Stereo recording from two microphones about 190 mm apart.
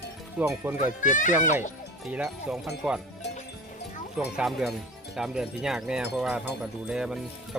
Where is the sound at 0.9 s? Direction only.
40° left (ahead or behind).